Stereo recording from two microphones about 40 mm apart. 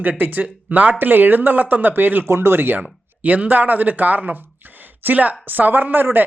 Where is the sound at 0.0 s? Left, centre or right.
Right.